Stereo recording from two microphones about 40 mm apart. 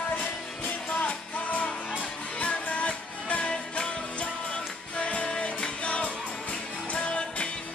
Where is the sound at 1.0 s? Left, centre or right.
Left.